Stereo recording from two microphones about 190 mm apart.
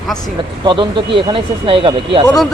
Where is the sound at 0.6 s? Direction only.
25° right (ahead or behind).